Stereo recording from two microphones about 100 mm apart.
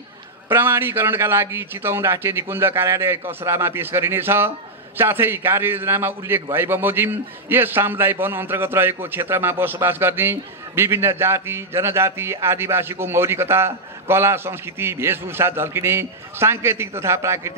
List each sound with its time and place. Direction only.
0.5 s a man's voice: 25° right (ahead or behind)